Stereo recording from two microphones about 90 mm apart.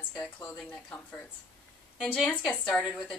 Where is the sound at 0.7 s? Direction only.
15° left (ahead or behind).